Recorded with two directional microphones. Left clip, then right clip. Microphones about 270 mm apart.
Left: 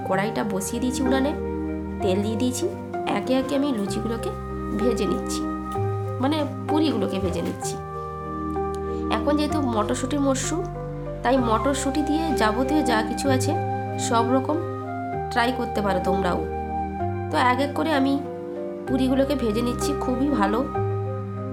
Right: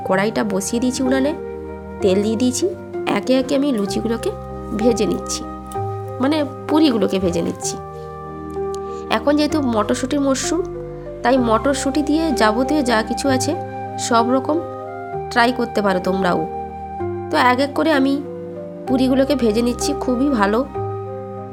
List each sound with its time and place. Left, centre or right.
0.1 s speech: right
9.0 s speech: right